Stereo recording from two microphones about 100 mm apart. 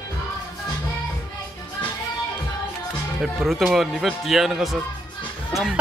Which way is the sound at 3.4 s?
Centre (ahead or behind).